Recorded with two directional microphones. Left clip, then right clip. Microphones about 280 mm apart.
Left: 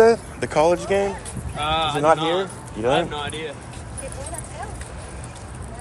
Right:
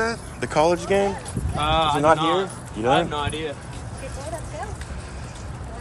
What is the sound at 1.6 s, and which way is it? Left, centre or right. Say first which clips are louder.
Speech: right 2 dB; right.